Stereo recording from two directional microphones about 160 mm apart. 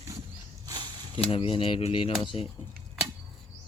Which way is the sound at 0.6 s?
25° right (ahead or behind).